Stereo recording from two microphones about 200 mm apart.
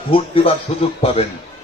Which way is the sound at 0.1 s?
30° left (ahead or behind).